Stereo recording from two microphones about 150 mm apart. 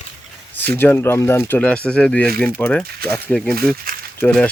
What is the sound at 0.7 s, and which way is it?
Speech, 15° left (ahead or behind).